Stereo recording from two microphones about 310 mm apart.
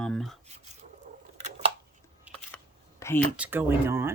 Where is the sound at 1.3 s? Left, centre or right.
Right.